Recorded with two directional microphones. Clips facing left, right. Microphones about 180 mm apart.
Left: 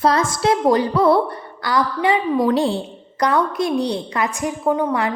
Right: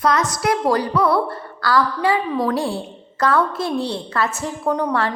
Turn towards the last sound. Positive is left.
turn(degrees=5)  # may be behind; listen again after turning